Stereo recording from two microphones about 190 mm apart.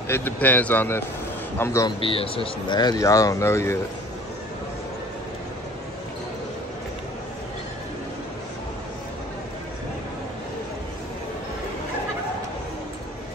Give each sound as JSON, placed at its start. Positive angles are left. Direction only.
{"t": 0.1, "sound": "speech", "side_deg": 10}
{"t": 2.0, "sound": "speech", "side_deg": 30}